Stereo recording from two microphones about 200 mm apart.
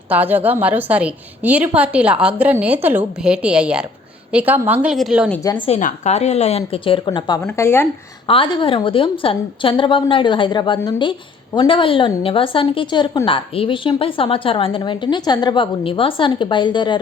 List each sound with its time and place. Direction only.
0.1 s a woman's voice: 10° right (ahead or behind)
5.3 s speech: 15° left (ahead or behind)
5.6 s a woman's voice: 30° left (ahead or behind)
7.4 s speech: 10° left (ahead or behind)
8.3 s a woman's voice: 25° left (ahead or behind)